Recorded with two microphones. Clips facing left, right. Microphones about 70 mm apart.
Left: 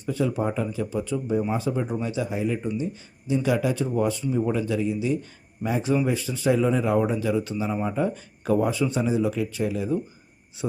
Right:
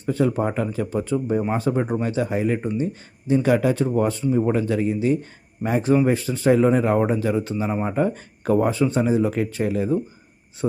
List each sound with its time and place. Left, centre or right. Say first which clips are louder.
0.0 s speech: right 4 dB; right
10.6 s speech: right 5 dB; right